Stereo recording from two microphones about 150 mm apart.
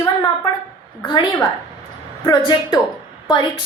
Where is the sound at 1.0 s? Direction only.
30° left (ahead or behind).